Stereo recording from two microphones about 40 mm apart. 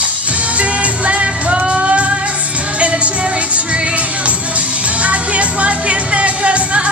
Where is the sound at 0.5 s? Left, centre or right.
Right.